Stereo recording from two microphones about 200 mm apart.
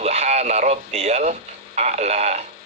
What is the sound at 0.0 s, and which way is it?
Speech, 30° right (ahead or behind).